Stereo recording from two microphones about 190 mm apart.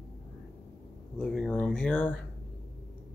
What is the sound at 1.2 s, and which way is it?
Speech, centre (ahead or behind).